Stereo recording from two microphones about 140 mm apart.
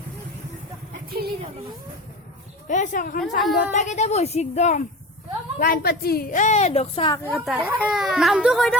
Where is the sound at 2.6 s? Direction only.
65° left (ahead or behind); by 3.2 s 80° left.